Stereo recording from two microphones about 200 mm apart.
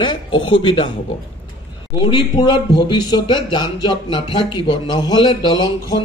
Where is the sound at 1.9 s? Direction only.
20° left (ahead or behind).